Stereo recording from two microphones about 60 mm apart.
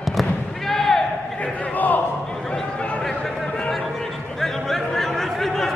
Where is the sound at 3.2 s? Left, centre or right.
Centre.